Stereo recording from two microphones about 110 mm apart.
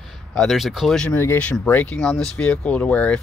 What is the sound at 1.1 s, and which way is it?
Speech, 20° left (ahead or behind).